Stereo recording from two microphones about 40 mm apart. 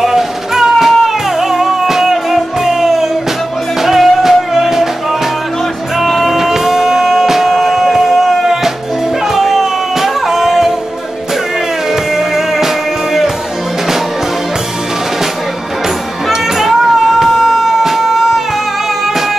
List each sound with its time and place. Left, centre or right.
0.0 s music: centre
5.9 s music: centre
11.9 s music: centre
16.3 s music: centre